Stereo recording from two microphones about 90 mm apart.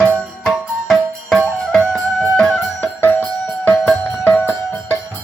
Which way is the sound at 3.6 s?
20° left (ahead or behind).